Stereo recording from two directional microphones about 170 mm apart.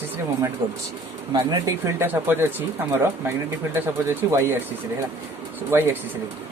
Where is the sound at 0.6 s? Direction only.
30° right (ahead or behind).